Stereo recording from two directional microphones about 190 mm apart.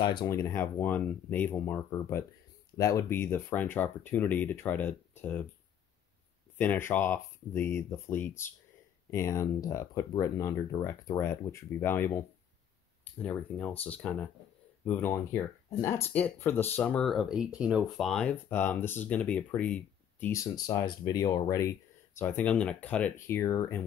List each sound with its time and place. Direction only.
0.0 s speech: 20° left (ahead or behind)
6.6 s speech: 10° left (ahead or behind)
13.2 s speech: 5° left (ahead or behind)